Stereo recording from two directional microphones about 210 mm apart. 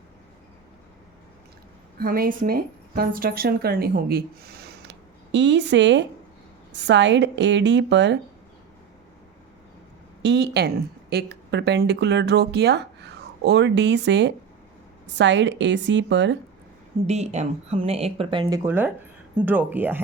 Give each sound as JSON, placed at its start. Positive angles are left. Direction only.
{"t": 2.0, "sound": "a woman's voice", "side_deg": -45}
{"t": 10.2, "sound": "a woman's voice", "side_deg": -55}
{"t": 17.1, "sound": "speech", "side_deg": -30}
{"t": 18.6, "sound": "speech", "side_deg": -10}